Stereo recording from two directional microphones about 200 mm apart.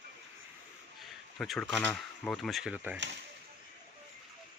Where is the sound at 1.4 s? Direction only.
Centre (ahead or behind).